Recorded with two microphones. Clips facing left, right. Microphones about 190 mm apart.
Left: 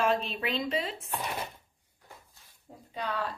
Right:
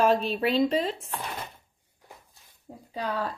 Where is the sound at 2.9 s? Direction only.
35° right (ahead or behind).